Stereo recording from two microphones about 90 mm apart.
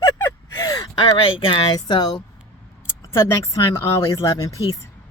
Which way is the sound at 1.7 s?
50° left (ahead or behind).